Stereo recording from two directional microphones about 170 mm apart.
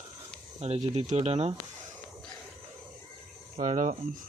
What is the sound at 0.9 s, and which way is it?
Speech, 40° right (ahead or behind).